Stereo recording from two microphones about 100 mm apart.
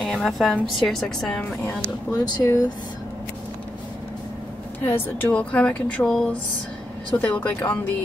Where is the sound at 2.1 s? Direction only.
35° left (ahead or behind).